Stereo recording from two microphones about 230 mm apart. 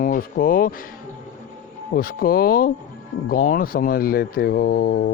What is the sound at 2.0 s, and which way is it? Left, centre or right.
Speech, left.